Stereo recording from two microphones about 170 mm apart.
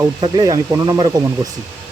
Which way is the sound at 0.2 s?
25° right (ahead or behind).